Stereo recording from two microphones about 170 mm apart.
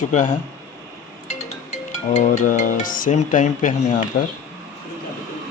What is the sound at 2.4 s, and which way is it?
Speech, 50° left (ahead or behind).